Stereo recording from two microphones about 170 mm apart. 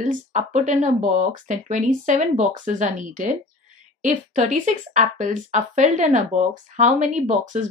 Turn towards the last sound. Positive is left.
turn(degrees=-45)  # may be behind; listen again after turning